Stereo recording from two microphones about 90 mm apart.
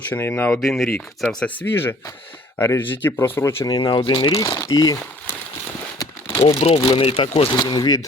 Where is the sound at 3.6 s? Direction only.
50° left (ahead or behind).